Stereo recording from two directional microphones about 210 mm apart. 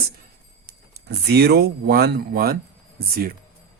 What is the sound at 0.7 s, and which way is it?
Speech, 50° right (ahead or behind).